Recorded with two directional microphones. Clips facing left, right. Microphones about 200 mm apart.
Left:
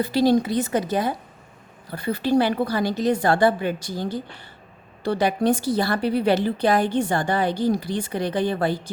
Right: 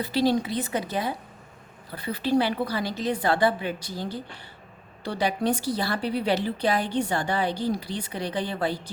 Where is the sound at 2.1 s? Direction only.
45° left (ahead or behind).